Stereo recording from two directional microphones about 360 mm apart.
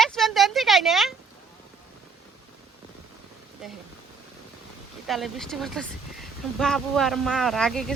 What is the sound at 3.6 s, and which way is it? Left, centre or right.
Speech, centre.